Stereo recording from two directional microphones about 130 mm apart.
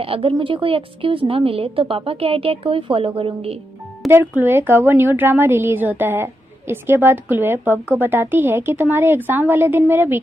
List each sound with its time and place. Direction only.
0.0 s a woman's voice: 45° right (ahead or behind)
4.1 s a woman's voice: 15° right (ahead or behind)